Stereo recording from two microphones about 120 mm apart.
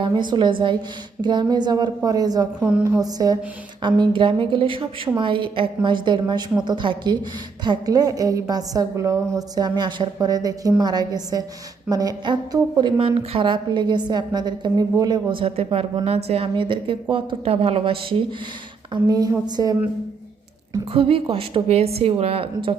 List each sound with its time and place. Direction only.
0.0 s a woman's voice: 40° right (ahead or behind)
2.6 s a woman's voice: 10° right (ahead or behind)
3.0 s a woman's voice: 30° right (ahead or behind)
13.0 s a woman's voice: 50° right (ahead or behind)
19.0 s a woman's voice: 35° right (ahead or behind)
20.9 s a woman's voice: 50° right (ahead or behind)